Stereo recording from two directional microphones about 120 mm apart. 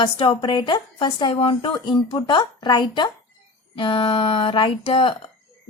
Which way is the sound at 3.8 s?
50° left (ahead or behind).